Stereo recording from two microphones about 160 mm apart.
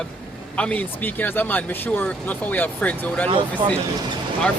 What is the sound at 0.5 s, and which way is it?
Speech, 10° left (ahead or behind).